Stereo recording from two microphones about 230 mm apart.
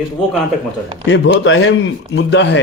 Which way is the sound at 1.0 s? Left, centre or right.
Left.